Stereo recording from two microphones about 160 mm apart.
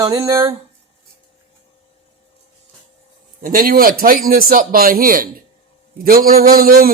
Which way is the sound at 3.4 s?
60° right (ahead or behind).